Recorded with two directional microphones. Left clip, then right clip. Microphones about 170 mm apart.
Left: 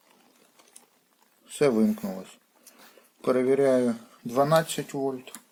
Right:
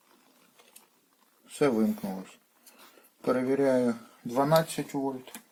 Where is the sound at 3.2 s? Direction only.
35° left (ahead or behind).